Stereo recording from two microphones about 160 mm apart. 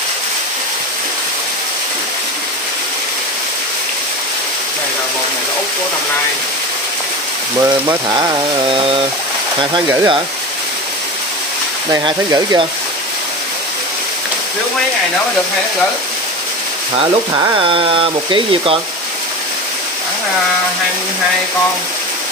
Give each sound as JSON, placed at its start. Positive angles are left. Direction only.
{"t": 7.8, "sound": "chainsaw", "side_deg": -25}
{"t": 9.8, "sound": "chainsaw", "side_deg": -30}
{"t": 11.9, "sound": "chainsaw", "side_deg": -25}
{"t": 16.9, "sound": "speech", "side_deg": -35}